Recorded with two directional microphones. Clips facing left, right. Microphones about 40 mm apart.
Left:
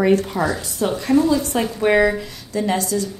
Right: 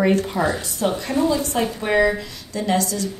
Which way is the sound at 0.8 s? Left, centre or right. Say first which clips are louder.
Left 1 dB; centre.